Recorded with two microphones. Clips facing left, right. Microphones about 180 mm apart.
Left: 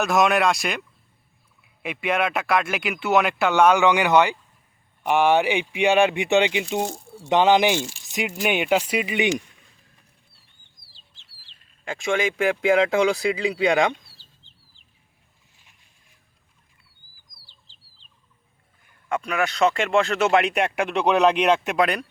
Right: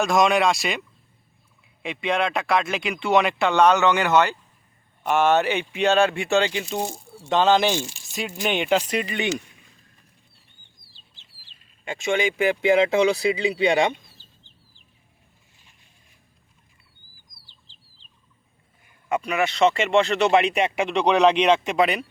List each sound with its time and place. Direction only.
0.0 s speech: centre (ahead or behind)
11.9 s speech: centre (ahead or behind)
19.0 s speech: 5° right (ahead or behind)